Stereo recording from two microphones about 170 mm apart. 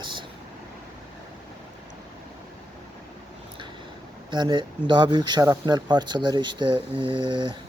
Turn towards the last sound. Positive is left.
turn(degrees=-25)  # may be behind; listen again after turning